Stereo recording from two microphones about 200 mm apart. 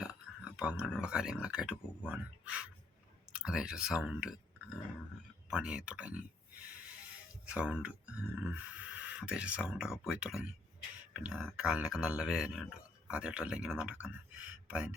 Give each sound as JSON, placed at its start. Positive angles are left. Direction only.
{"t": 0.0, "sound": "speech", "side_deg": -5}
{"t": 5.5, "sound": "speech", "side_deg": -5}
{"t": 7.5, "sound": "speech", "side_deg": -5}